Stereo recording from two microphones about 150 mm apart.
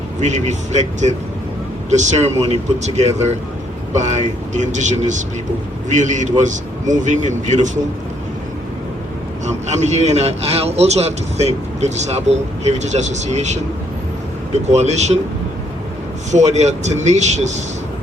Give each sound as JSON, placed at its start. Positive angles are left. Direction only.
{"t": 0.2, "sound": "a man's voice", "side_deg": -50}
{"t": 9.6, "sound": "a man's voice", "side_deg": -50}
{"t": 14.7, "sound": "a man's voice", "side_deg": -50}
{"t": 16.3, "sound": "a man's voice", "side_deg": -50}